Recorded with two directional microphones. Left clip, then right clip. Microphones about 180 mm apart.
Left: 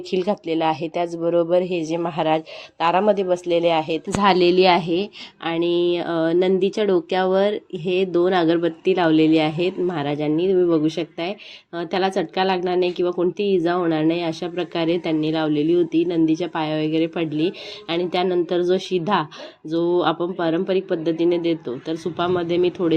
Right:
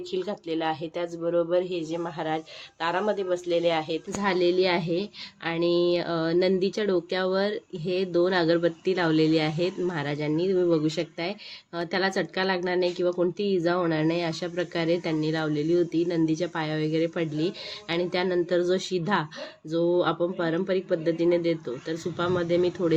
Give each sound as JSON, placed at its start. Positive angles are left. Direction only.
{"t": 0.1, "sound": "a woman's voice", "side_deg": 35}
{"t": 4.2, "sound": "a woman's voice", "side_deg": 45}
{"t": 5.7, "sound": "a woman's voice", "side_deg": 20}